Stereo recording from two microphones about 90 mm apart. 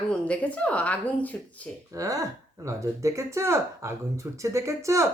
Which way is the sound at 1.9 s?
40° right (ahead or behind).